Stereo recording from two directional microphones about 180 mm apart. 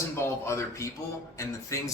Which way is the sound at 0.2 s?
15° left (ahead or behind).